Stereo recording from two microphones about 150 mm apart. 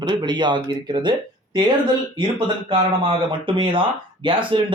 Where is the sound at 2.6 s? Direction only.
35° right (ahead or behind).